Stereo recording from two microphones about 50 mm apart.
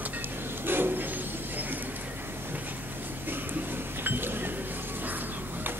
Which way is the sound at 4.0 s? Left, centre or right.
Right.